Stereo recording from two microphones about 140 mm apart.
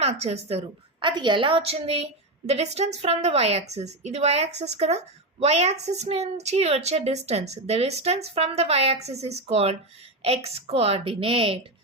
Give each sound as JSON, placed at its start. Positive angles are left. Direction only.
{"t": 0.0, "sound": "speech", "side_deg": -50}
{"t": 0.9, "sound": "a woman's voice", "side_deg": -35}